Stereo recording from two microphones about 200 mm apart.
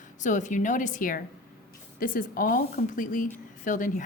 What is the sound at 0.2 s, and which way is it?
A woman's voice, 40° left (ahead or behind).